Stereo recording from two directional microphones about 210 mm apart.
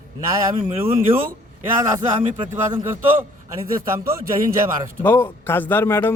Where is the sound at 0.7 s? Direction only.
25° right (ahead or behind).